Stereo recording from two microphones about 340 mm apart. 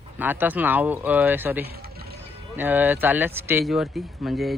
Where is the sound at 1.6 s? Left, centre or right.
Right.